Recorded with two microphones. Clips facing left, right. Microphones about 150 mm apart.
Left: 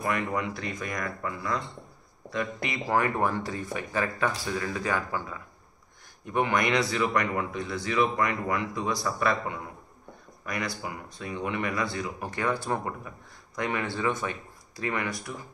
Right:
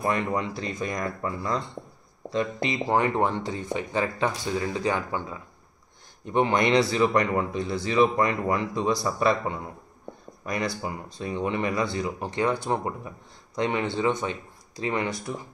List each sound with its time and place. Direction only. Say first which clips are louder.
0.0 s speech: right 3 dB; 25° right (ahead or behind)